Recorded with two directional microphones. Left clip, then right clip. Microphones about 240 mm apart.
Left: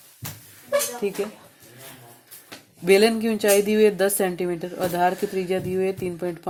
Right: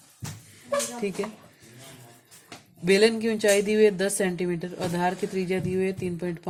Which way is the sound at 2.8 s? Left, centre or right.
Left.